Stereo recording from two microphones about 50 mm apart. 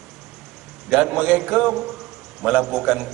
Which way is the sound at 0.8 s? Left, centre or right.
Centre.